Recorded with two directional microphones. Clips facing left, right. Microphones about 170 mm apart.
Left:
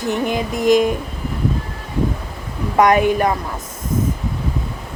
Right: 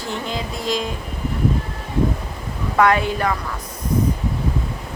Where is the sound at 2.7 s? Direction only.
15° left (ahead or behind).